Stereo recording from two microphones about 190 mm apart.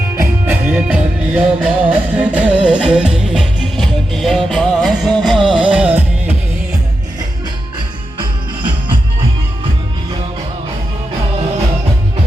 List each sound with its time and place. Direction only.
0.2 s music: 10° right (ahead or behind)